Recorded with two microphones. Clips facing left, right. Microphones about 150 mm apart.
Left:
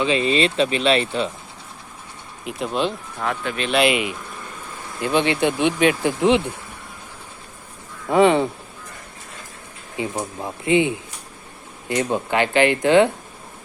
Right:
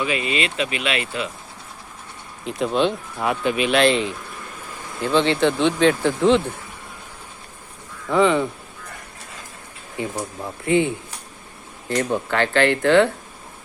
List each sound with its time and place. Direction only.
0.0 s speech: 30° left (ahead or behind)
2.4 s speech: 5° left (ahead or behind)
3.2 s speech: 15° right (ahead or behind)
3.7 s speech: 10° left (ahead or behind)
8.0 s speech: 25° left (ahead or behind)
10.0 s speech: 20° left (ahead or behind)